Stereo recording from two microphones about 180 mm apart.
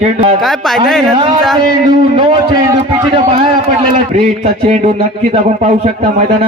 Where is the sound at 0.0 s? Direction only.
35° right (ahead or behind).